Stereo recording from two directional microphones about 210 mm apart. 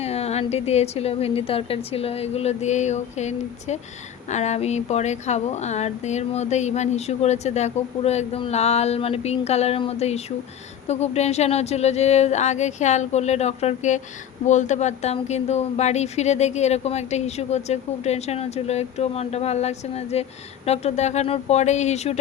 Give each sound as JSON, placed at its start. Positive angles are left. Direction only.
{"t": 0.0, "sound": "a woman's voice", "side_deg": 30}